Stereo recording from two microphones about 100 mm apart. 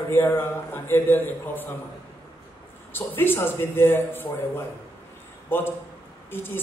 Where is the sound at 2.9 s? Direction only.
20° left (ahead or behind).